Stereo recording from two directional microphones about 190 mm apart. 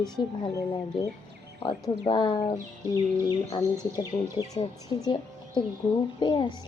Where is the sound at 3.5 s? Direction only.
20° left (ahead or behind).